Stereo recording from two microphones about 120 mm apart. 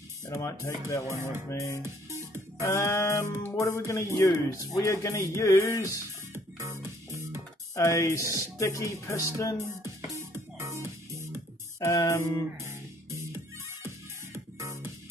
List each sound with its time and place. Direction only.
0.2 s speech: 25° left (ahead or behind)
1.0 s music: 25° right (ahead or behind)
1.5 s speech: 25° left (ahead or behind)
1.8 s music: 20° right (ahead or behind)
2.6 s speech: 25° left (ahead or behind)
6.3 s music: 20° right (ahead or behind)
7.7 s speech: 25° left (ahead or behind)
9.6 s music: 25° right (ahead or behind)
11.8 s speech: 25° left (ahead or behind)
12.5 s music: 25° right (ahead or behind)